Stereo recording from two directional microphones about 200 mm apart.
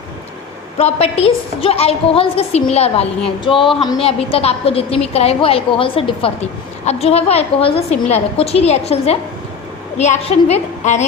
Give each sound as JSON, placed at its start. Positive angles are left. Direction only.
{"t": 0.8, "sound": "a woman's voice", "side_deg": 30}